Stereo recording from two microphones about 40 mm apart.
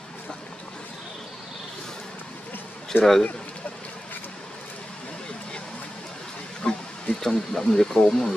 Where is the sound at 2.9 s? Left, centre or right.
Left.